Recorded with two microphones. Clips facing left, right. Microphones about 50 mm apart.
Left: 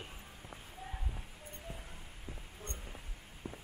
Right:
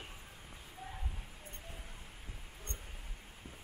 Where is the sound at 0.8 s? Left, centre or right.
Centre.